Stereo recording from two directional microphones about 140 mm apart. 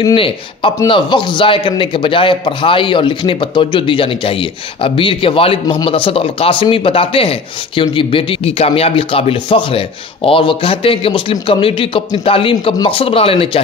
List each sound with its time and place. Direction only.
0.0 s speech: 40° left (ahead or behind)